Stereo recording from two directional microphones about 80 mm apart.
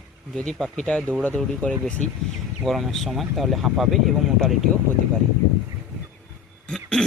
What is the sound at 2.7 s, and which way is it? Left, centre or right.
Speech, centre.